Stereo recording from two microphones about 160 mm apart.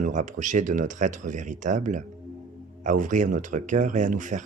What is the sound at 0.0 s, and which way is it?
Speech, 50° right (ahead or behind).